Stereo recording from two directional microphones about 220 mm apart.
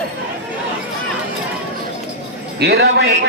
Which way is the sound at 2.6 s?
50° right (ahead or behind).